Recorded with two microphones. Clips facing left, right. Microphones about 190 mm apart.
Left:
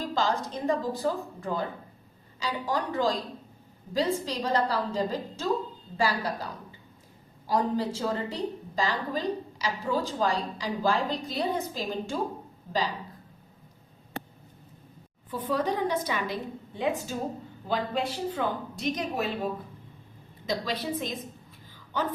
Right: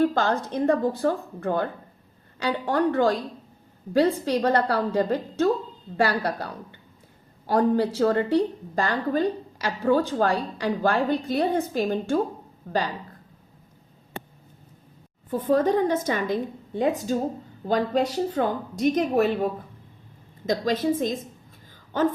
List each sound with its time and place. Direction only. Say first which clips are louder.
0.0 s a woman's voice: right 6 dB; 60° right (ahead or behind)
15.3 s a woman's voice: right 7 dB; 50° right (ahead or behind)
20.5 s a woman's voice: right 7 dB; 45° right (ahead or behind)